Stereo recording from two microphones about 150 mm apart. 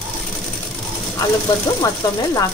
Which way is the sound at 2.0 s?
25° left (ahead or behind).